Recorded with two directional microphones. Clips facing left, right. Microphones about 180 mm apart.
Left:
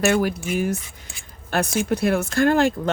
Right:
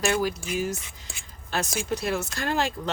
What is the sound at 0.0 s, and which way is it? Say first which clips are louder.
Speech: left 5 dB; 60° left (ahead or behind).